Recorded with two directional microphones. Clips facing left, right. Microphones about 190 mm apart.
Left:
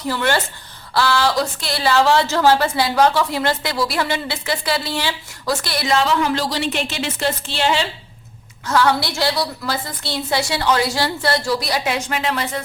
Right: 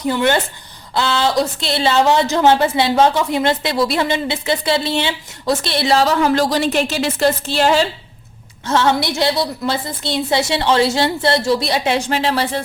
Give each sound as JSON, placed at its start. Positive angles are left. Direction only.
{"t": 0.1, "sound": "a woman's voice", "side_deg": -20}
{"t": 8.6, "sound": "a woman's voice", "side_deg": -25}